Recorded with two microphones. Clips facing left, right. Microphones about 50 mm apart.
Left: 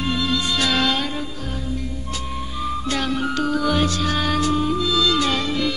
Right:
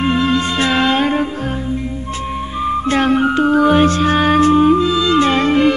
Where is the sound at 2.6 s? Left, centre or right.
Right.